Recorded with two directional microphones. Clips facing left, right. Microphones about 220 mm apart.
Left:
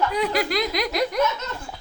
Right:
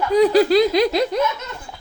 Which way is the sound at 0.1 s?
35° right (ahead or behind).